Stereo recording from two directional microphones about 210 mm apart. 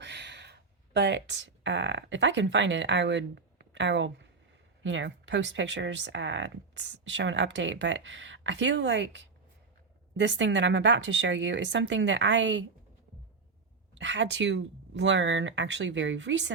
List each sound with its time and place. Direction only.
0.0 s speech: 55° right (ahead or behind)
13.9 s speech: 60° right (ahead or behind)